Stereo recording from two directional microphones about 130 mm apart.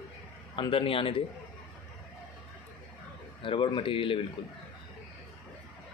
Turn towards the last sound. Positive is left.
turn(degrees=40)  # may be behind; listen again after turning